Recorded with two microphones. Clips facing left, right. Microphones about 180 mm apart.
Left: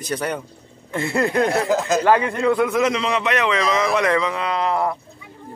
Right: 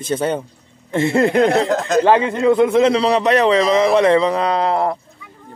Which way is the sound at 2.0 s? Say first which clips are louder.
Right 3 dB; 20° right (ahead or behind).